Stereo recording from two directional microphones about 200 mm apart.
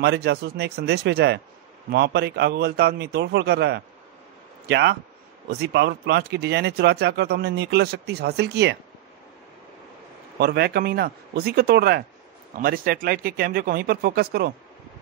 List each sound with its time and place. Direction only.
0.0 s speech: 55° right (ahead or behind)
10.4 s speech: 55° right (ahead or behind)